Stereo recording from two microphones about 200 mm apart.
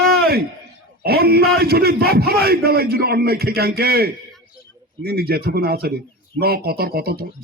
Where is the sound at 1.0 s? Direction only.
50° right (ahead or behind).